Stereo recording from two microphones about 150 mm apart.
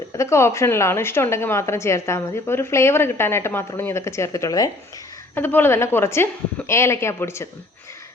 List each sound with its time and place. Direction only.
0.2 s a woman's voice: 20° left (ahead or behind)